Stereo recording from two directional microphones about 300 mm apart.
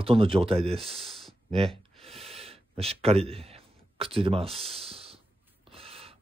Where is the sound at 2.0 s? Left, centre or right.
Centre.